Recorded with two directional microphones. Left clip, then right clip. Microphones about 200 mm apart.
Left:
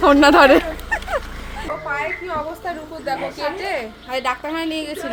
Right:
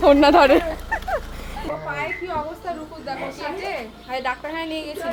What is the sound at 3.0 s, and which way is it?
Speech, 30° left (ahead or behind).